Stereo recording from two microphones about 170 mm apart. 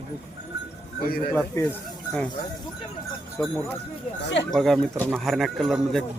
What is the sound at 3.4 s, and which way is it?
Speech, 15° left (ahead or behind).